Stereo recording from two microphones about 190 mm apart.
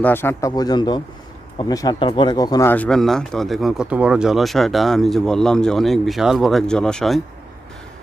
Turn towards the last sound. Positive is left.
turn(degrees=0)  # may be behind; listen again after turning